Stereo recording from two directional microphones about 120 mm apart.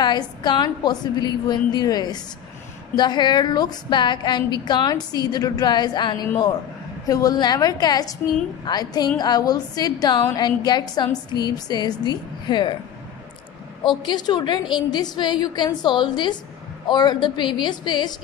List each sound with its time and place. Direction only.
0.0 s a woman's voice: 35° left (ahead or behind)
14.0 s a woman's voice: 35° left (ahead or behind)